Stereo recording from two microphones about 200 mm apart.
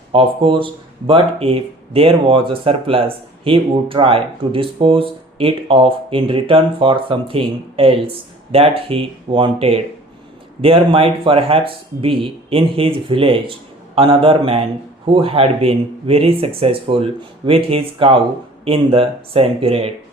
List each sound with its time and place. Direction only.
0.1 s speech: 25° right (ahead or behind)